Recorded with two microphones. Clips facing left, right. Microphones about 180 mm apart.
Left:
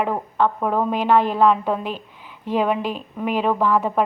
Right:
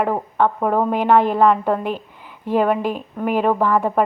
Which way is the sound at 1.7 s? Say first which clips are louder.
Right 3 dB; 55° right (ahead or behind).